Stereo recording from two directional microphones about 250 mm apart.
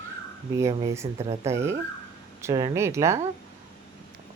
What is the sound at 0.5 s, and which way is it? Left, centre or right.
Speech, centre.